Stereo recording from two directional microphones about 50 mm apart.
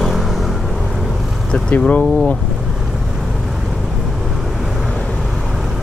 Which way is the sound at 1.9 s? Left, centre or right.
Left.